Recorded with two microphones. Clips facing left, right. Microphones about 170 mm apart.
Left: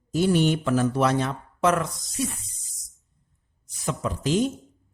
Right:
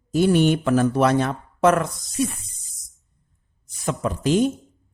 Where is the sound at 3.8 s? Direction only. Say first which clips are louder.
Right 4 dB; 55° right (ahead or behind).